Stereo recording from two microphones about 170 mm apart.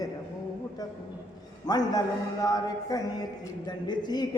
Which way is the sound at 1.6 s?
25° left (ahead or behind).